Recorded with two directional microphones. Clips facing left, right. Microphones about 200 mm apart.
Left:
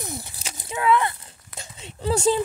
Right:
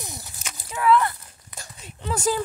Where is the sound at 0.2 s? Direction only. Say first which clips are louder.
Left 2 dB; 30° left (ahead or behind).